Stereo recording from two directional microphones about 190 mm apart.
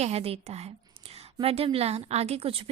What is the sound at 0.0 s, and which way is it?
A woman's voice, 30° right (ahead or behind).